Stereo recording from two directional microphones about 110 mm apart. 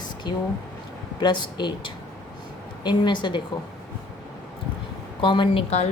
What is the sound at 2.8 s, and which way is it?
Speech, 45° left (ahead or behind).